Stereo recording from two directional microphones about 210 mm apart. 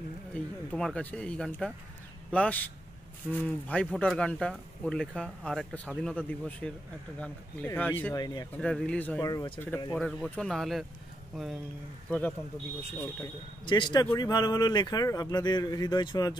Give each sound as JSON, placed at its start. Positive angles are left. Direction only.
{"t": 0.3, "sound": "speech", "side_deg": 5}
{"t": 8.5, "sound": "speech", "side_deg": 5}
{"t": 9.2, "sound": "speech", "side_deg": 15}
{"t": 13.7, "sound": "speech", "side_deg": 25}